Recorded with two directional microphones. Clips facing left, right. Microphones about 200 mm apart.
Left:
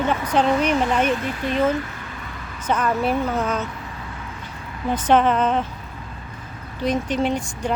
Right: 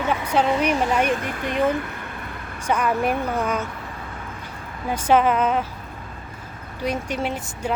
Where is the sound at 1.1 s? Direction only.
50° right (ahead or behind).